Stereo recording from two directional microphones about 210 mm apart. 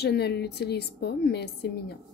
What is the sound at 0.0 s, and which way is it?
Speech, 50° left (ahead or behind).